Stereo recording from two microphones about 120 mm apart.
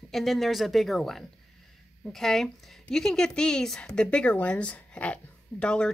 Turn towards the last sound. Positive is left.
turn(degrees=10)  # may be behind; listen again after turning